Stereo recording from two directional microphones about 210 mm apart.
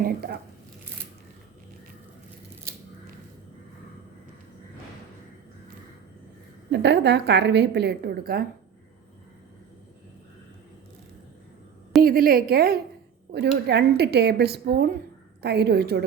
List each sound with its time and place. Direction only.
0.0 s a woman's voice: 50° right (ahead or behind)
6.7 s a woman's voice: 55° right (ahead or behind)
12.0 s a woman's voice: 45° right (ahead or behind)